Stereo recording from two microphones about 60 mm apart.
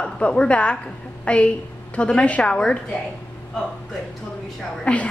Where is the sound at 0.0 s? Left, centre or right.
Centre.